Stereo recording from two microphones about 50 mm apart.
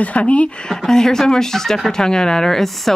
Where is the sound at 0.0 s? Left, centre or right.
Left.